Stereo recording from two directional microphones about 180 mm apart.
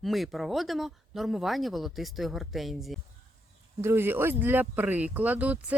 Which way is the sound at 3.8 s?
10° right (ahead or behind).